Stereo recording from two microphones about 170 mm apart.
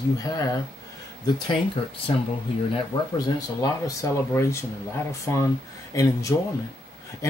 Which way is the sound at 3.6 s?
20° left (ahead or behind).